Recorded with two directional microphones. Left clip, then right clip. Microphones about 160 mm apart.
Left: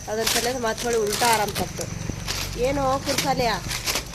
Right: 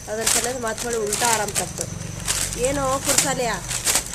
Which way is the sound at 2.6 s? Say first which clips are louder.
Even; 5° right (ahead or behind).